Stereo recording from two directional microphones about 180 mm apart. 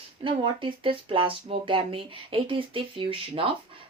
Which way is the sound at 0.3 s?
30° right (ahead or behind).